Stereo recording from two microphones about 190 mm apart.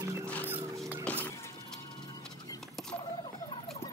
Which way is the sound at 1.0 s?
10° left (ahead or behind).